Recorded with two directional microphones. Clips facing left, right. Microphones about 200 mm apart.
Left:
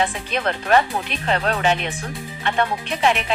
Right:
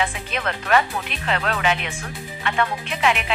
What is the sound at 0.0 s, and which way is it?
Speech, 35° left (ahead or behind).